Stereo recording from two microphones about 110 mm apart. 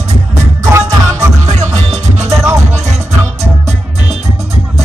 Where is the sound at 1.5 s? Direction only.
80° right.